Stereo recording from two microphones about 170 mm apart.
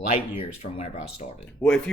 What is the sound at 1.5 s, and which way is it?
Speech, 5° left (ahead or behind).